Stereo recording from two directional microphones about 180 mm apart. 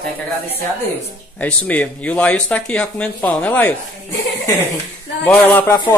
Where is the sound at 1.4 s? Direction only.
10° left (ahead or behind).